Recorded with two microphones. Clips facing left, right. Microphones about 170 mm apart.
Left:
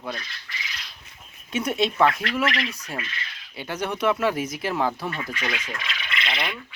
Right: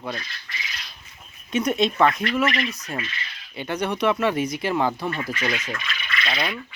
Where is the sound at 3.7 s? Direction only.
5° left (ahead or behind).